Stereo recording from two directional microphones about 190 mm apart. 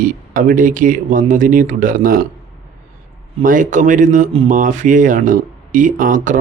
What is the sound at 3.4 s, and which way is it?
Speech, 45° right (ahead or behind).